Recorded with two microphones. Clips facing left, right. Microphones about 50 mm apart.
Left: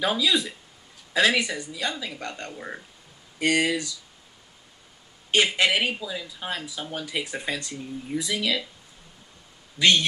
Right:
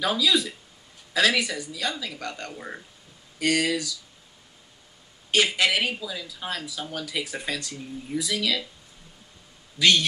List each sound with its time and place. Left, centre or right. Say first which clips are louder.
0.0 s speech: even; centre
2.5 s speech: left 1 dB; centre
3.3 s speech: left 1 dB; centre
5.3 s speech: left 1 dB; centre
9.8 s speech: even; left